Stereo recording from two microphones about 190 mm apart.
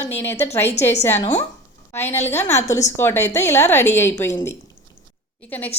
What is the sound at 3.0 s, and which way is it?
A woman's voice, 10° left (ahead or behind).